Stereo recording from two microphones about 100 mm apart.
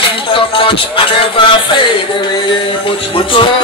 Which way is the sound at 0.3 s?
60° left (ahead or behind).